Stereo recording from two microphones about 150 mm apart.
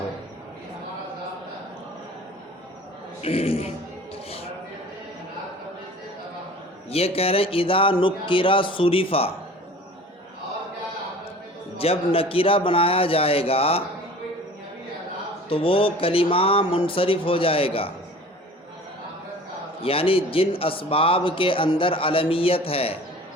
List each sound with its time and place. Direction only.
3.2 s a man's voice: 40° left (ahead or behind)
6.9 s a man's voice: 40° left (ahead or behind)
11.8 s a man's voice: 40° left (ahead or behind)
15.4 s a man's voice: 40° left (ahead or behind)
19.8 s a man's voice: 40° left (ahead or behind)